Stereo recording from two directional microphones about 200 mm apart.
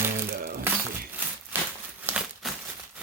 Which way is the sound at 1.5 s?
10° right (ahead or behind).